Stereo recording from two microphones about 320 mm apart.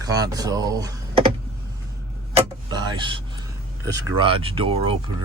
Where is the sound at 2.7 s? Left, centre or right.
Centre.